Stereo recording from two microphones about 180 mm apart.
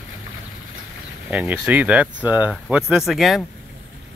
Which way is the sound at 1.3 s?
5° right (ahead or behind).